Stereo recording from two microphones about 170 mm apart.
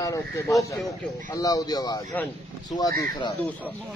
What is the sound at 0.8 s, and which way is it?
A man's voice, 20° left (ahead or behind).